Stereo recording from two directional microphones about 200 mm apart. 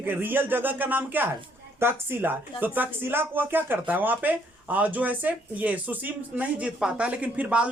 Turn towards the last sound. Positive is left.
turn(degrees=-5)  # may be behind; listen again after turning